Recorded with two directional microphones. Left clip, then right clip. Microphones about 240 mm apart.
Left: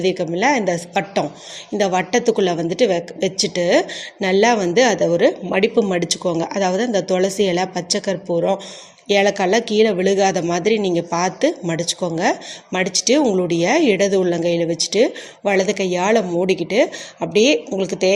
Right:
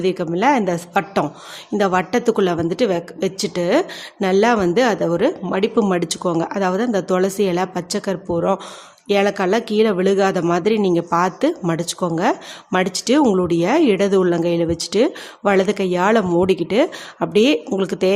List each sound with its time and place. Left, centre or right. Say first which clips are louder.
0.0 s speech: even; centre